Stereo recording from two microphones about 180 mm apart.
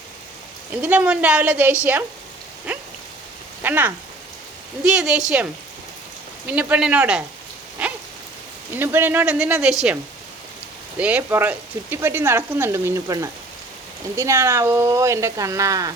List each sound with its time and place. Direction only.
0.8 s speech: 5° right (ahead or behind)
3.6 s speech: 10° right (ahead or behind)
6.5 s speech: 10° right (ahead or behind)
7.8 s rain: 5° right (ahead or behind)
8.7 s speech: 10° right (ahead or behind)
10.9 s speech: 10° right (ahead or behind)